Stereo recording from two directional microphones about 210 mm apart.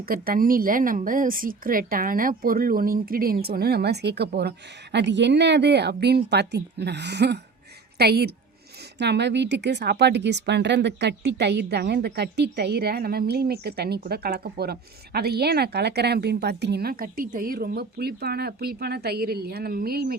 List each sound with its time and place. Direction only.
0.0 s a woman's voice: 45° right (ahead or behind)